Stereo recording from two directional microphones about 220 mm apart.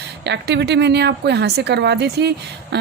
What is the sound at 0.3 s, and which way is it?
Speech, 50° right (ahead or behind).